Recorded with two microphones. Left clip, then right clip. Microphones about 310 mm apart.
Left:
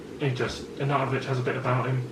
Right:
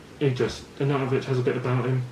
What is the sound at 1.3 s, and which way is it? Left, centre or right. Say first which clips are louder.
Speech: right 4 dB; centre.